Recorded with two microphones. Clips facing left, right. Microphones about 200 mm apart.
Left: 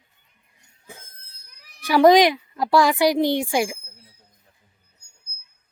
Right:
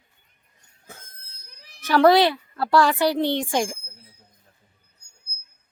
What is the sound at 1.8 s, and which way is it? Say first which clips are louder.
A woman's voice: left 2 dB; 10° left (ahead or behind).